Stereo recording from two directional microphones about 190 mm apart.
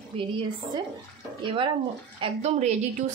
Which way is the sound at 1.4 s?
25° right (ahead or behind).